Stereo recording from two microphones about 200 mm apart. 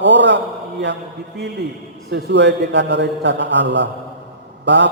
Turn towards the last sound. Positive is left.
turn(degrees=-60)  # may be behind; listen again after turning